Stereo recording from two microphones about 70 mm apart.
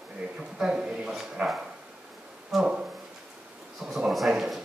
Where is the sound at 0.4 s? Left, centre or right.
Centre.